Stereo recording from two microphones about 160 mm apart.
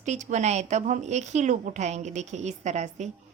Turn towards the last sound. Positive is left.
turn(degrees=-45)  # may be behind; listen again after turning